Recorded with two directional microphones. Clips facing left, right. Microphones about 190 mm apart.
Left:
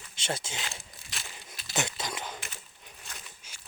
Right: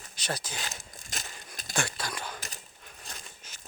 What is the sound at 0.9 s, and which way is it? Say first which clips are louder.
Crushing: right 2 dB; 45° right (ahead or behind).